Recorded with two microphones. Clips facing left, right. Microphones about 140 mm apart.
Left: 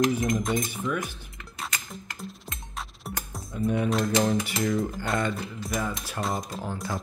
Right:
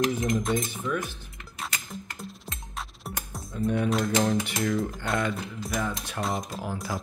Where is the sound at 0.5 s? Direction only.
Centre (ahead or behind).